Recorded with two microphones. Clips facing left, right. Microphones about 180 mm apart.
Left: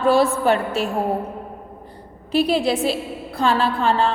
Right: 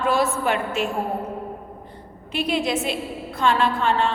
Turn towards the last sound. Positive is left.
turn(degrees=35)  # may be behind; listen again after turning